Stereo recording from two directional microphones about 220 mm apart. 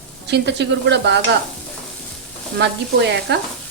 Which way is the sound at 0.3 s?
50° right (ahead or behind).